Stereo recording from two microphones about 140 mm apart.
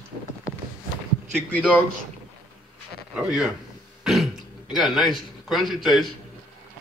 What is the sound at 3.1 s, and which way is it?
Speech, 5° right (ahead or behind).